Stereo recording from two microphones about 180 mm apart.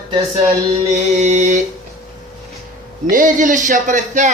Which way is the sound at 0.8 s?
40° right (ahead or behind).